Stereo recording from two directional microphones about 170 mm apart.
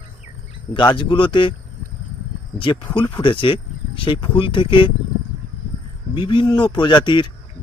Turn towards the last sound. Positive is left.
turn(degrees=25)  # may be behind; listen again after turning